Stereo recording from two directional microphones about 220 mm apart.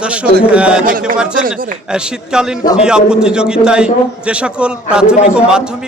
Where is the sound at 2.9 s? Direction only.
5° right (ahead or behind).